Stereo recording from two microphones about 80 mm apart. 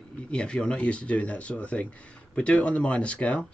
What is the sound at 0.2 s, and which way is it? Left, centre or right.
Speech, centre.